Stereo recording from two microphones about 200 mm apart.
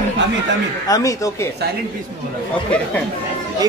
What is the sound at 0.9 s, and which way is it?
Speech, 15° left (ahead or behind).